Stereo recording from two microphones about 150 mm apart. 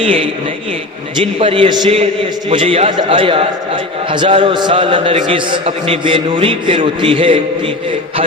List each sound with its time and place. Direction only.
1.2 s a man's voice: 35° right (ahead or behind)